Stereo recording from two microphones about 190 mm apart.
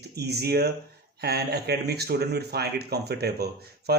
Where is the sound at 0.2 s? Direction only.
60° right (ahead or behind).